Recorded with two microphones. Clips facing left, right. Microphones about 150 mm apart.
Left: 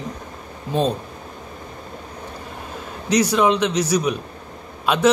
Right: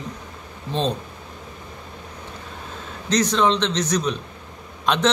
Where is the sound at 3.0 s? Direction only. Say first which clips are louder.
Left 2 dB; 10° left (ahead or behind).